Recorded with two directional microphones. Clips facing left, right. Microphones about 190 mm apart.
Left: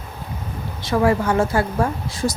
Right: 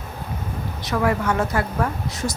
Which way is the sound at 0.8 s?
30° left (ahead or behind).